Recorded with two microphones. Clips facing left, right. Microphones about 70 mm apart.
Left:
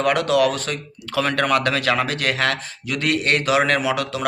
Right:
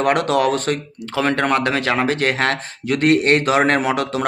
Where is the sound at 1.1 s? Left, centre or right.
Right.